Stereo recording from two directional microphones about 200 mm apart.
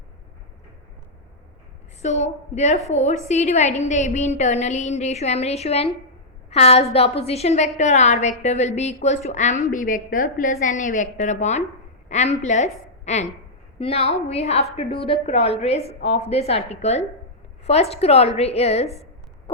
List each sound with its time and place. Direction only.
2.0 s a woman's voice: 35° left (ahead or behind)